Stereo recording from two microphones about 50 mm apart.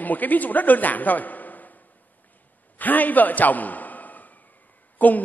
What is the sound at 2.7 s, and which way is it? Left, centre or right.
A man's voice, left.